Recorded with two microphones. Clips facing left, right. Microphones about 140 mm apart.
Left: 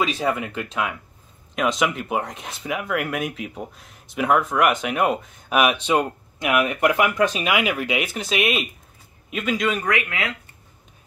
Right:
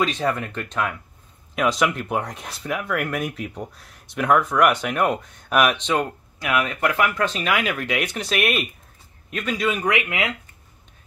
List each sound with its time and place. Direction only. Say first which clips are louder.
0.0 s speech: even; 5° left (ahead or behind)
9.8 s speech: right 2 dB; 20° right (ahead or behind)